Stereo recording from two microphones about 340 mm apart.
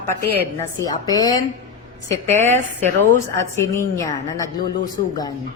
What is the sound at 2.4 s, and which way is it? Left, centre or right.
A woman's voice, centre.